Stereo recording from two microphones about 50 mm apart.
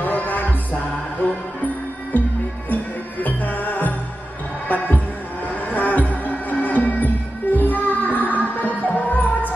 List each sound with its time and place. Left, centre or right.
0.0 s music: left
2.1 s music: left